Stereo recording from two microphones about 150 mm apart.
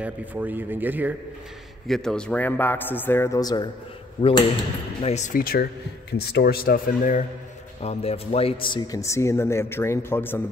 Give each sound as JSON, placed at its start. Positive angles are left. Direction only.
{"t": 0.0, "sound": "speech", "side_deg": -10}
{"t": 1.9, "sound": "a man's voice", "side_deg": 5}
{"t": 5.0, "sound": "speech", "side_deg": 50}
{"t": 5.3, "sound": "speech", "side_deg": 80}
{"t": 6.1, "sound": "speech", "side_deg": 90}
{"t": 7.8, "sound": "a man's voice", "side_deg": 45}